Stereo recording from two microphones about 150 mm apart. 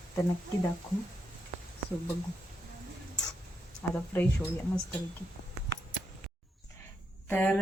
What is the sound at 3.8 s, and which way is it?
Speech, 15° left (ahead or behind).